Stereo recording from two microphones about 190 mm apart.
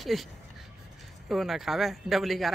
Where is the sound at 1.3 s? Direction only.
Centre (ahead or behind).